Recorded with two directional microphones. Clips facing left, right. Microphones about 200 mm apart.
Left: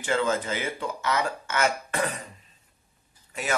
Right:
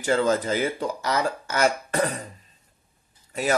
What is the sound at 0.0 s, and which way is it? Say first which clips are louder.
Speech: right 4 dB; 40° right (ahead or behind).